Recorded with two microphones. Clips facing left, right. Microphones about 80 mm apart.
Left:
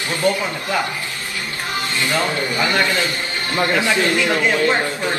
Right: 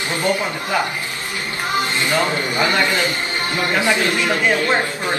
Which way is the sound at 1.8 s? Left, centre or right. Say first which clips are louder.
Right 1 dB; right.